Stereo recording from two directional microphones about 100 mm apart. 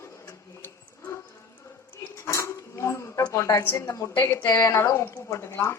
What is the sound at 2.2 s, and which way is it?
A woman's voice, 30° left (ahead or behind).